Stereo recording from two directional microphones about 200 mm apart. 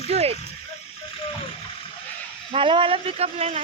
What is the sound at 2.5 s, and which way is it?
Speech, 25° right (ahead or behind).